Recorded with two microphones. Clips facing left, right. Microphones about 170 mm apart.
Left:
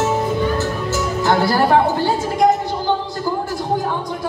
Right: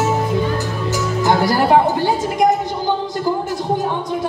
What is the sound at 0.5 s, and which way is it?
Music, 15° right (ahead or behind).